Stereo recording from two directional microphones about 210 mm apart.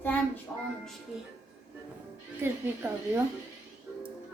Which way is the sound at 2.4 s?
10° right (ahead or behind).